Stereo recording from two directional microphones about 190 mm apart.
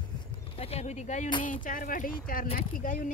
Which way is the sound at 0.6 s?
35° left (ahead or behind).